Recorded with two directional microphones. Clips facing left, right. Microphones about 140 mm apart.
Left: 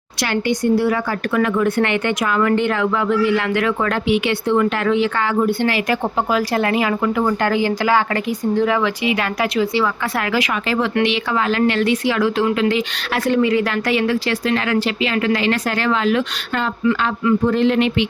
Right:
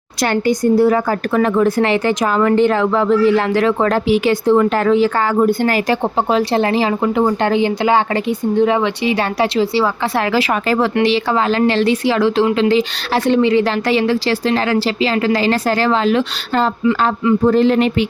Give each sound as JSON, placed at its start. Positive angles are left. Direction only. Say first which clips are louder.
{"t": 0.2, "sound": "a woman's voice", "louder": "right 4 dB", "side_deg": -45}
{"t": 5.9, "sound": "a woman's voice", "louder": "right 3 dB", "side_deg": -30}